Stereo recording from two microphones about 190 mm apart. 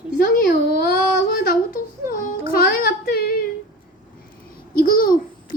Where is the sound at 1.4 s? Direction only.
50° left (ahead or behind).